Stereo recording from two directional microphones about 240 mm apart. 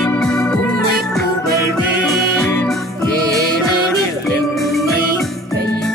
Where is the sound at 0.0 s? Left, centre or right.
Centre.